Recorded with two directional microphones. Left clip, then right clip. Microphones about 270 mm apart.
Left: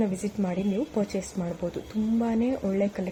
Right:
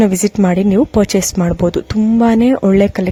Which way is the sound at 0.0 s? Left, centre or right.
Right.